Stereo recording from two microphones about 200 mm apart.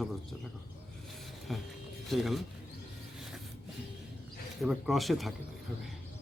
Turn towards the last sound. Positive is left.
turn(degrees=0)  # may be behind; listen again after turning